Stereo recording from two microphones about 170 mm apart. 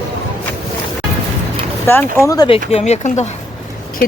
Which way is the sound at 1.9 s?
15° left (ahead or behind).